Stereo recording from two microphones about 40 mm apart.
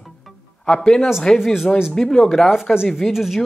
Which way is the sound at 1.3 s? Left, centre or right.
Left.